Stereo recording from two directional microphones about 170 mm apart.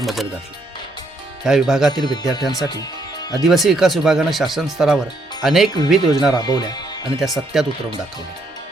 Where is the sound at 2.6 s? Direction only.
20° left (ahead or behind).